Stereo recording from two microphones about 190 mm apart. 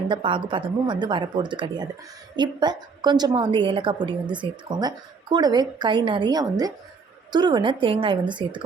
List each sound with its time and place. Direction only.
0.1 s a woman's voice: 25° right (ahead or behind)